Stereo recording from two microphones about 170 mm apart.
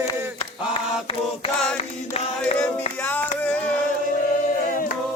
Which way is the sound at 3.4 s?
10° left (ahead or behind).